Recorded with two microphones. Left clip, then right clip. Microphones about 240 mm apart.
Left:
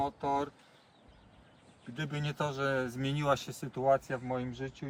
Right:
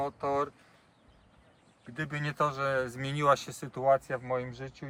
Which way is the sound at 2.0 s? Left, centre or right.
Right.